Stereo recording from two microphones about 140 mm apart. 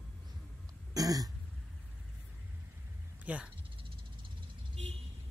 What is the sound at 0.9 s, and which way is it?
Throat clearing, 25° right (ahead or behind).